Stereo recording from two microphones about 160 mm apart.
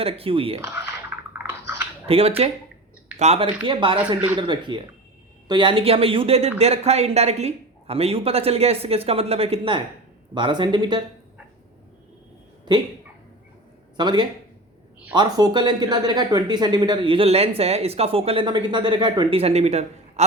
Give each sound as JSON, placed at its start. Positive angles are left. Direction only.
{"t": 0.0, "sound": "speech", "side_deg": -35}
{"t": 1.5, "sound": "dog", "side_deg": -15}
{"t": 2.0, "sound": "speech", "side_deg": -35}
{"t": 3.4, "sound": "speech", "side_deg": -30}
{"t": 13.9, "sound": "speech", "side_deg": -30}